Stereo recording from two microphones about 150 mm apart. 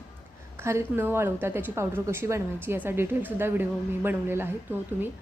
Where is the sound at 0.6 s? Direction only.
15° right (ahead or behind).